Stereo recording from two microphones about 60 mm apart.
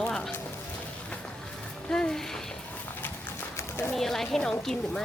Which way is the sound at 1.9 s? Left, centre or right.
Centre.